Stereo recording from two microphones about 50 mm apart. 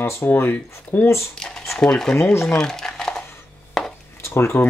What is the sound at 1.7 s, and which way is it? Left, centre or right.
Speech, centre.